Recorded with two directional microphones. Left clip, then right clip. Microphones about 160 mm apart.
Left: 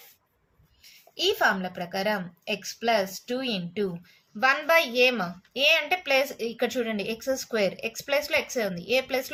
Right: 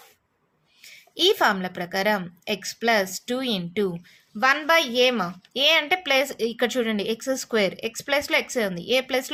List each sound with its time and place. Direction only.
0.8 s a woman's voice: 50° right (ahead or behind)
4.4 s a woman's voice: 40° right (ahead or behind)